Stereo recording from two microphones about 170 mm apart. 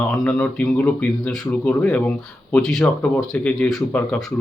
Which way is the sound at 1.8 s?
5° left (ahead or behind).